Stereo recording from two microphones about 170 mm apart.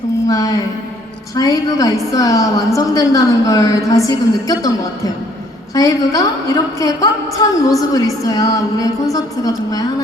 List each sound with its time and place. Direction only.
0.3 s a woman's voice: 20° left (ahead or behind)
5.7 s a woman's voice: 20° left (ahead or behind)